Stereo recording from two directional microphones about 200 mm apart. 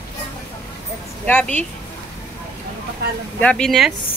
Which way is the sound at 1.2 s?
5° left (ahead or behind).